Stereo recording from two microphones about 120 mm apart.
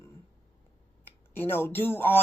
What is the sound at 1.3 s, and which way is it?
Speech, 20° left (ahead or behind).